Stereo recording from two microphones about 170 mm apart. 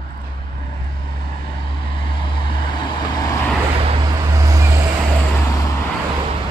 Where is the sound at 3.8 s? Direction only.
30° right (ahead or behind).